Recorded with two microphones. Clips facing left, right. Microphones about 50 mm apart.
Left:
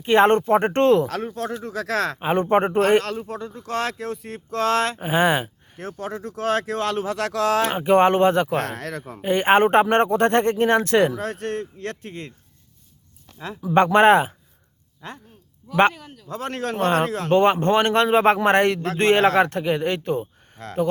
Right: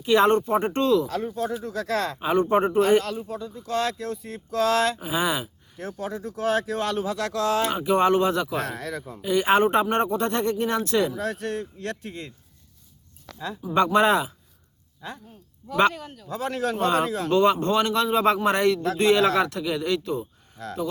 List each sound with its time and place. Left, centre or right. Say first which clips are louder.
0.0 s speech: left 3 dB; left
1.0 s a man's voice: left 1 dB; left
2.1 s speech: left 1 dB; left
2.7 s speech: left 2 dB; left
7.8 s speech: left 5 dB; left
8.5 s a man's voice: left 3 dB; left
9.2 s speech: left 3 dB; left
13.7 s speech: left 5 dB; left
16.0 s speech: right 3 dB; centre
16.3 s speech: even; left
17.3 s speech: left 3 dB; left